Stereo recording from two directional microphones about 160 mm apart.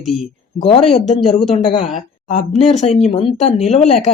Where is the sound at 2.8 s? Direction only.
40° left (ahead or behind).